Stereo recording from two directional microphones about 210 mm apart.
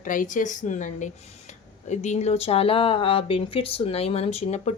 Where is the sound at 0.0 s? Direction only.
40° left (ahead or behind).